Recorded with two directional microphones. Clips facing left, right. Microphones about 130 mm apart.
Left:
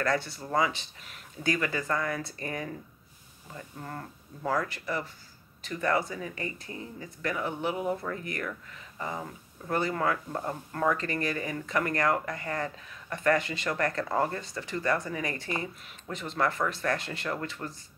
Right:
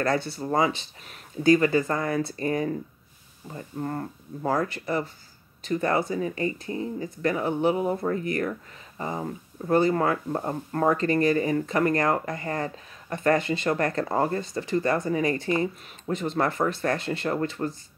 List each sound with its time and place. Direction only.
0.0 s speech: 30° right (ahead or behind)